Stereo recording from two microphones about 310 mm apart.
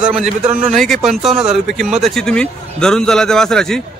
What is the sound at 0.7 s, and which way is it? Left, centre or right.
Speech, centre.